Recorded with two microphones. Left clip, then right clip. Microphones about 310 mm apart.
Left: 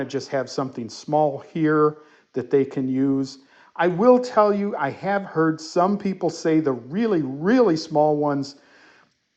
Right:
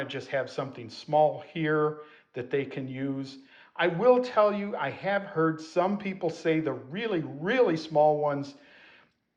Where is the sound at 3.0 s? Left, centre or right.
Centre.